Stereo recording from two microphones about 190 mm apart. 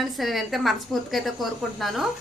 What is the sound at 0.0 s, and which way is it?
A woman's voice, centre (ahead or behind).